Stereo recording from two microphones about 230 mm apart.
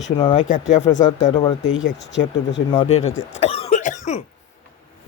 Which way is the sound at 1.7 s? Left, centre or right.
Left.